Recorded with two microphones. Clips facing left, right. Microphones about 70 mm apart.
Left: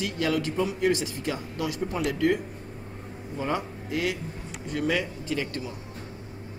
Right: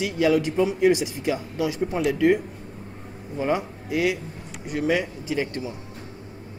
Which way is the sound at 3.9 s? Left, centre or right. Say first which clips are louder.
Right 5 dB; right.